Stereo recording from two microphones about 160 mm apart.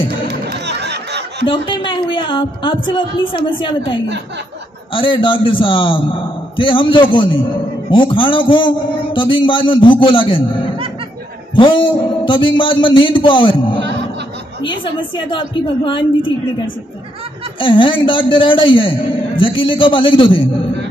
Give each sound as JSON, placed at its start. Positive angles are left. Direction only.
{"t": 0.3, "sound": "a sound", "side_deg": -90}
{"t": 1.4, "sound": "a man's voice", "side_deg": 30}
{"t": 4.9, "sound": "a man's voice", "side_deg": 30}